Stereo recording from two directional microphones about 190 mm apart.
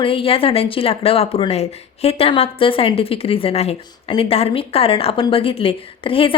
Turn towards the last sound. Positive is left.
turn(degrees=30)  # may be behind; listen again after turning